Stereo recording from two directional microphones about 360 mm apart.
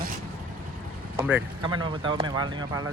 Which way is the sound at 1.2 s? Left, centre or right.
Centre.